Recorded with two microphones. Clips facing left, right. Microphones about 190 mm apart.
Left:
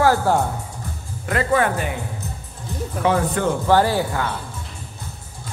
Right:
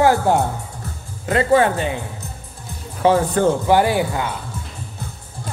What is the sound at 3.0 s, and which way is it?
Speech, 30° right (ahead or behind).